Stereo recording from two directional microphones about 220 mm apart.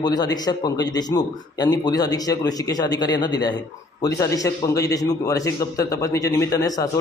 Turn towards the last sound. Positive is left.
turn(degrees=15)  # may be behind; listen again after turning